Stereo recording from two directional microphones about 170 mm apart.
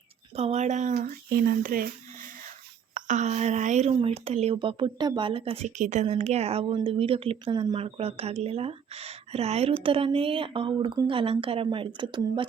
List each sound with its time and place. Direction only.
0.3 s speech: 40° right (ahead or behind)
0.9 s speech: 60° right (ahead or behind)
2.9 s speech: 45° right (ahead or behind); by 12.5 s 30° right (ahead or behind)